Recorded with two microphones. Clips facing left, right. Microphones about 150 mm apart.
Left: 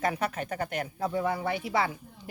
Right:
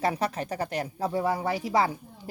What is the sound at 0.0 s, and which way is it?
Speech, 35° right (ahead or behind).